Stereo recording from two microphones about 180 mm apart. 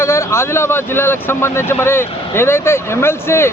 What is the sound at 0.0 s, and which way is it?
Speech, 15° left (ahead or behind).